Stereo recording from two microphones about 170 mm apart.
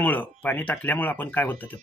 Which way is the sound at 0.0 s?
10° left (ahead or behind).